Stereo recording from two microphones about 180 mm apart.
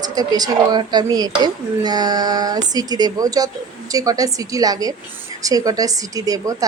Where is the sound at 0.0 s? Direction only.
20° right (ahead or behind).